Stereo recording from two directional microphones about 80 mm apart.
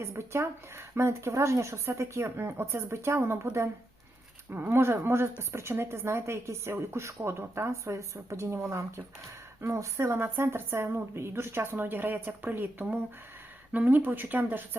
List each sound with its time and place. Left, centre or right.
0.0 s a woman's voice: right
4.5 s a woman's voice: right
9.6 s a woman's voice: right